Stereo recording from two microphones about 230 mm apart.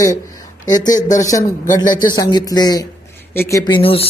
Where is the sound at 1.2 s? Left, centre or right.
Centre.